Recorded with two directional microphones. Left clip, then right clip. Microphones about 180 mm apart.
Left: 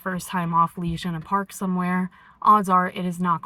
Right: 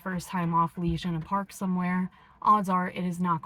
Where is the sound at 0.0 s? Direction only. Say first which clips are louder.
Left 5 dB; 25° left (ahead or behind).